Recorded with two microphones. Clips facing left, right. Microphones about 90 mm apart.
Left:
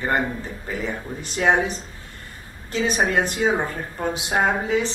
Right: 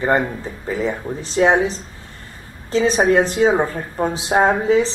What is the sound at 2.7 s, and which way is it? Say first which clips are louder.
Speech: right 6 dB; 35° right (ahead or behind).